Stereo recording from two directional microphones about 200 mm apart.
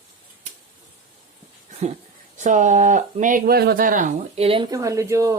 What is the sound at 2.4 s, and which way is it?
Speech, 40° right (ahead or behind).